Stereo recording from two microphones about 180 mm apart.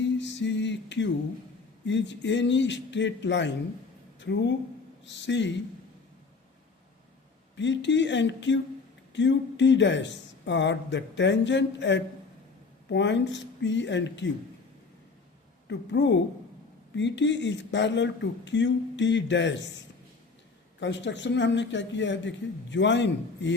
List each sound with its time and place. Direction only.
0.2 s music: 80° left
1.9 s speech: 80° left
7.5 s speech: 90° left
15.6 s speech: 80° left
20.7 s speech: 80° left